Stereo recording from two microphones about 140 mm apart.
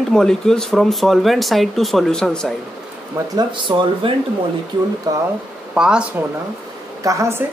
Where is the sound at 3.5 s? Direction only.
35° right (ahead or behind).